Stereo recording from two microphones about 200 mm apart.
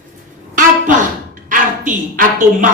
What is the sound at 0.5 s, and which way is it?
A man's voice, 40° right (ahead or behind).